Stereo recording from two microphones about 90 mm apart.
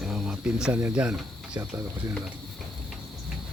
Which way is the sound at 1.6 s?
30° right (ahead or behind).